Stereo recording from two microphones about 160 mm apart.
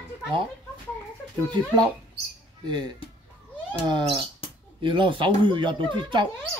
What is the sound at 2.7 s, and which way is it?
Speech, 25° right (ahead or behind).